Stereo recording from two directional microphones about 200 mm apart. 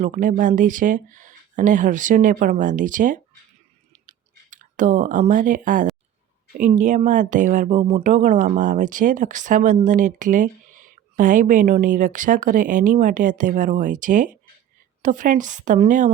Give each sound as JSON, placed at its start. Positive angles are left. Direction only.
{"t": 0.0, "sound": "speech", "side_deg": -40}
{"t": 4.0, "sound": "a sound", "side_deg": -40}
{"t": 6.6, "sound": "speech", "side_deg": -40}